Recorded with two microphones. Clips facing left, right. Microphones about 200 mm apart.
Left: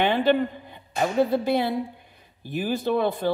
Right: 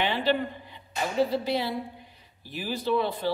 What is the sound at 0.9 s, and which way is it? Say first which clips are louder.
Speech: left 4 dB; 50° left (ahead or behind).